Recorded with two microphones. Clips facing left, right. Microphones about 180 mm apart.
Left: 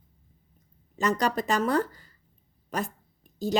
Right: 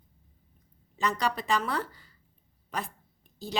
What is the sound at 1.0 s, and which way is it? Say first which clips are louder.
Speech: left 4 dB; 45° left (ahead or behind).